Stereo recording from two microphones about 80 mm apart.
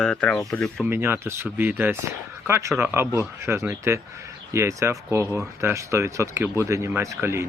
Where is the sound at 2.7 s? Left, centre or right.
Right.